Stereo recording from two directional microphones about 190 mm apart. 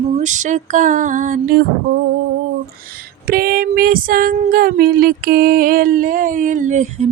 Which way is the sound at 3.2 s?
50° right (ahead or behind).